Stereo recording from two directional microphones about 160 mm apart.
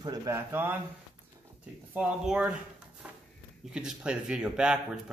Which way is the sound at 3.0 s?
5° right (ahead or behind).